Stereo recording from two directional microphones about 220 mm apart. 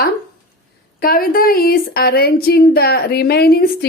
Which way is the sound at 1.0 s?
40° left (ahead or behind).